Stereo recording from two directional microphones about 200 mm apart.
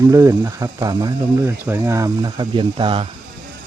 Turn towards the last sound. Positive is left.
turn(degrees=-25)  # may be behind; listen again after turning